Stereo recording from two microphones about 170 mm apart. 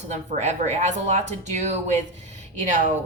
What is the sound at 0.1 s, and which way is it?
Speech, 40° right (ahead or behind).